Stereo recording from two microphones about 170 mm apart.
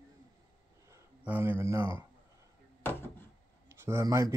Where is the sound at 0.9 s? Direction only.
10° right (ahead or behind).